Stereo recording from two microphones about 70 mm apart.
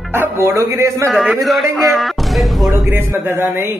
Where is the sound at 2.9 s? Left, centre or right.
Right.